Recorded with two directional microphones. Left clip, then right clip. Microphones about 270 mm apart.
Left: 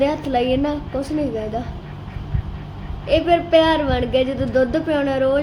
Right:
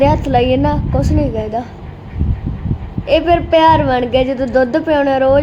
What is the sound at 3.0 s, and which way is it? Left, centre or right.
A woman's voice, centre.